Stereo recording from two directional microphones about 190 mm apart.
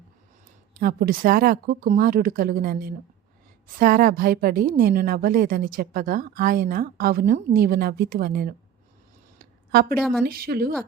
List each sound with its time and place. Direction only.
0.7 s a woman's voice: 55° right (ahead or behind)
10.0 s a woman's voice: 5° left (ahead or behind)
10.2 s a woman's voice: 50° right (ahead or behind)